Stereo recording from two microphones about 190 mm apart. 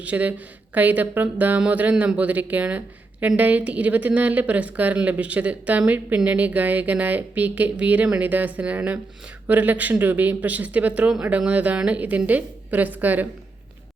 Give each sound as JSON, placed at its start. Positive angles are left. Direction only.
{"t": 0.0, "sound": "speech", "side_deg": -10}